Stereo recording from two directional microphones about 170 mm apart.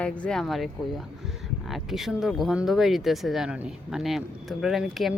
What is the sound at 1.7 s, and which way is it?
Speech, centre (ahead or behind).